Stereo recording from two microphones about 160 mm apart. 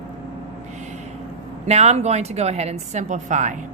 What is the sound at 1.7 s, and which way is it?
A woman's voice, 40° right (ahead or behind).